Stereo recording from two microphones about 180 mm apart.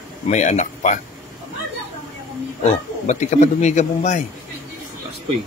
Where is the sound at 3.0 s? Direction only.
40° left (ahead or behind).